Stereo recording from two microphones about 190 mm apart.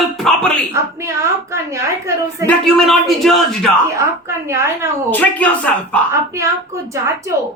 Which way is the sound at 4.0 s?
15° right (ahead or behind).